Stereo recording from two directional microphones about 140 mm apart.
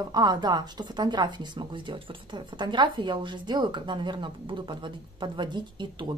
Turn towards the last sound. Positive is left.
turn(degrees=-35)  # may be behind; listen again after turning